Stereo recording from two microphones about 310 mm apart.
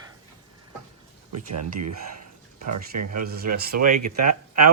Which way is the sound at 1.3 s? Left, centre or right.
Right.